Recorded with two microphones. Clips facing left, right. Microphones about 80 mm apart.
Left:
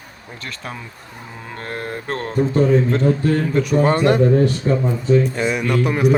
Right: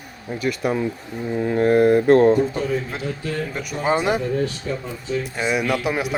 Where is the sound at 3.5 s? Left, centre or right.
Centre.